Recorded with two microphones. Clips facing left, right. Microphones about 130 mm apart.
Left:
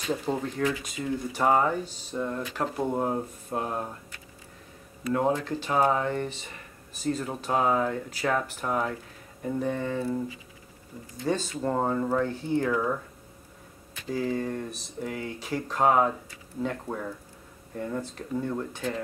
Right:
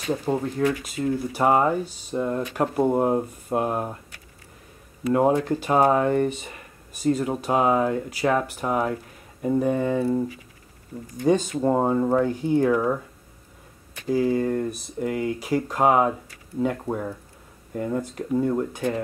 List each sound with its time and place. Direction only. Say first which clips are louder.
0.1 s speech: right 4 dB; 10° right (ahead or behind)
5.1 s speech: right 6 dB; 15° right (ahead or behind)
9.9 s speech: right 6 dB; 25° right (ahead or behind)
11.1 s speech: right 8 dB; 15° right (ahead or behind)
14.0 s speech: right 7 dB; 10° right (ahead or behind)
17.7 s speech: right 6 dB; 10° right (ahead or behind)